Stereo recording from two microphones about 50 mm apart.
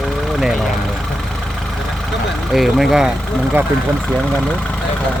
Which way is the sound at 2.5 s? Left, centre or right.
Centre.